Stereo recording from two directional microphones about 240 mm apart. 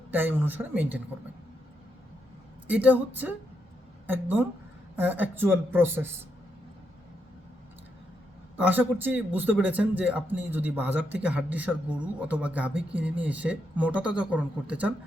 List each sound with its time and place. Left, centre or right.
0.1 s a man's voice: centre
2.6 s a man's voice: centre
8.5 s a man's voice: centre